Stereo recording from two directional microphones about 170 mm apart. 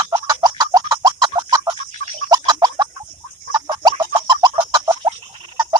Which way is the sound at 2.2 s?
20° right (ahead or behind).